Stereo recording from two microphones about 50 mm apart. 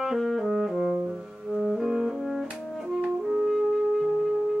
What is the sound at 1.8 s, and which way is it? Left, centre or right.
Music, centre.